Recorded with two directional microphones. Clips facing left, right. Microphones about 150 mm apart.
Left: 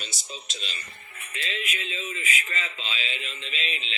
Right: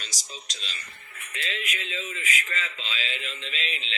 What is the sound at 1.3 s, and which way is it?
Speech, 20° left (ahead or behind).